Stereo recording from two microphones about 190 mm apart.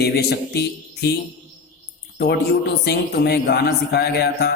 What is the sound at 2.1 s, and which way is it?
A man's voice, 60° left (ahead or behind).